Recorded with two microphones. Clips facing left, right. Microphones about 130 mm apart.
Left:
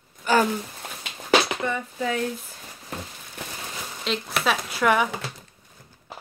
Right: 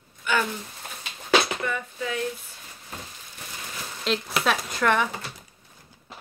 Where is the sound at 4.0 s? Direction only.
Centre (ahead or behind).